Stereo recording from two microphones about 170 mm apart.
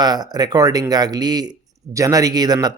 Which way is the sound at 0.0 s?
25° right (ahead or behind).